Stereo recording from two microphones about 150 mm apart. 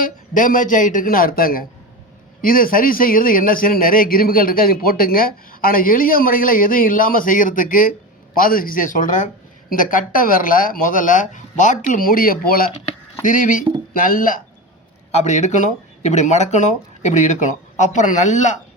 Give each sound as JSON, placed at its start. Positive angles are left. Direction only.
{"t": 0.0, "sound": "a man's voice", "side_deg": 60}
{"t": 11.9, "sound": "a man's voice", "side_deg": 70}
{"t": 13.2, "sound": "a man's voice", "side_deg": 60}
{"t": 15.1, "sound": "speech", "side_deg": 50}